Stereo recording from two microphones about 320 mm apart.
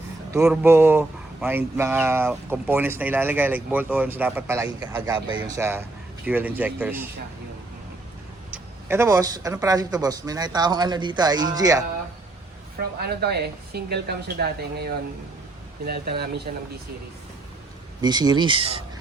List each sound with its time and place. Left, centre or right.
0.3 s speech: centre
8.5 s speech: centre
13.0 s speech: right
18.0 s speech: centre